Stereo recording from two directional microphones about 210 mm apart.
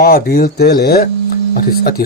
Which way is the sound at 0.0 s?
45° left (ahead or behind).